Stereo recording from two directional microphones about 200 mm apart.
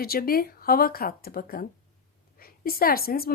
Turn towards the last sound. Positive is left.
turn(degrees=50)  # may be behind; listen again after turning